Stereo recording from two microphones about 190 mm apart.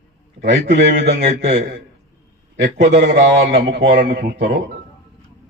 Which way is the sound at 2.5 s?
65° right (ahead or behind).